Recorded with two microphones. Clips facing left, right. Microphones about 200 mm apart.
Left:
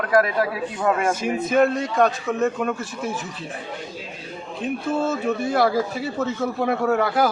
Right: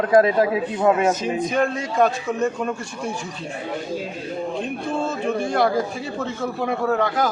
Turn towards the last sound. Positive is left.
turn(degrees=5)  # may be behind; listen again after turning